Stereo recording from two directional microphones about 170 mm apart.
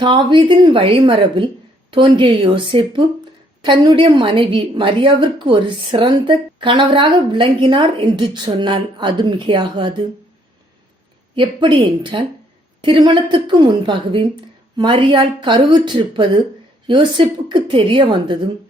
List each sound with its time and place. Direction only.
0.0 s a woman's voice: 30° right (ahead or behind)
11.3 s a woman's voice: 30° right (ahead or behind)